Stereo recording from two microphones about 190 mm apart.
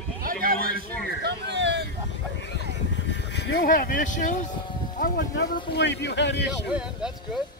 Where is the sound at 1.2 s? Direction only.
65° right (ahead or behind).